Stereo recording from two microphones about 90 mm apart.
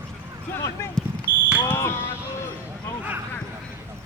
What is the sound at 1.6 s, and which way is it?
Smoke detector, 30° left (ahead or behind).